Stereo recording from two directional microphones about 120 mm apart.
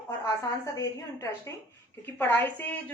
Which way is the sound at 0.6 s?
25° left (ahead or behind).